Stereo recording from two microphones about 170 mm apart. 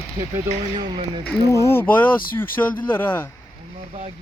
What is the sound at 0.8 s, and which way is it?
Speech, 30° right (ahead or behind).